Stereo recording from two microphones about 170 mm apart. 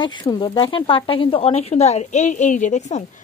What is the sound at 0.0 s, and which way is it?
Speech, 25° left (ahead or behind).